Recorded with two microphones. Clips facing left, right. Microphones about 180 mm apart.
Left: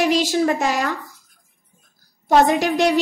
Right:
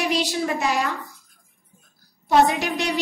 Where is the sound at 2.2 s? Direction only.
45° left (ahead or behind).